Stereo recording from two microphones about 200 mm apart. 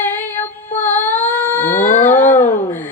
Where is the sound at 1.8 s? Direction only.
40° left (ahead or behind).